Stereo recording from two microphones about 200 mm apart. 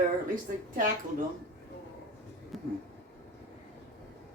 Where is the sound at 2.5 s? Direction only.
Centre (ahead or behind).